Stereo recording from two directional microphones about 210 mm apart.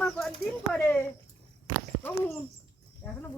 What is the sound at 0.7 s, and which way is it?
Speech, 10° left (ahead or behind).